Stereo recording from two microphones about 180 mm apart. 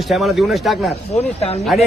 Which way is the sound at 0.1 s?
Centre (ahead or behind).